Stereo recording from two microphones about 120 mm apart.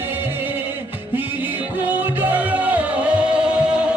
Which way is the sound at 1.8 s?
15° right (ahead or behind).